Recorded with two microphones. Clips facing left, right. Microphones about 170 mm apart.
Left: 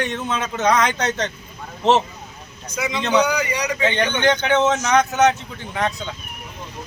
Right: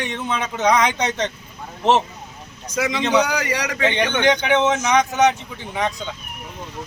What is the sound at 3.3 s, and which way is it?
Speech, 90° right.